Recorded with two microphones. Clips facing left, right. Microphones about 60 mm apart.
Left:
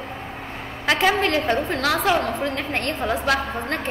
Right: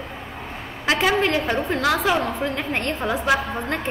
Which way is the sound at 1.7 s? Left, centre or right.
Right.